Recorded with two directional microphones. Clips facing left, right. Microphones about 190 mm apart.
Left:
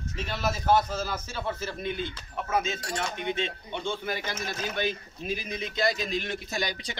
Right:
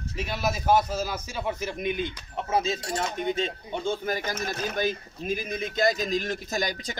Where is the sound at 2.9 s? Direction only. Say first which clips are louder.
Right 2 dB; 40° right (ahead or behind).